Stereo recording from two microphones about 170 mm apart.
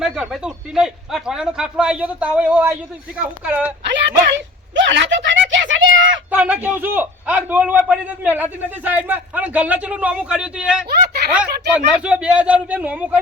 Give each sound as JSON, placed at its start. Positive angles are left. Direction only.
{"t": 0.0, "sound": "a man's voice", "side_deg": -5}
{"t": 3.8, "sound": "speech", "side_deg": -90}
{"t": 4.7, "sound": "a sound", "side_deg": -90}
{"t": 6.3, "sound": "a man's voice", "side_deg": -10}
{"t": 10.8, "sound": "a sound", "side_deg": -70}
{"t": 11.9, "sound": "a man's voice", "side_deg": -5}